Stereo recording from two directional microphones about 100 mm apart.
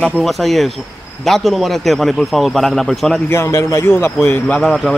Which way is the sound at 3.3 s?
30° left (ahead or behind).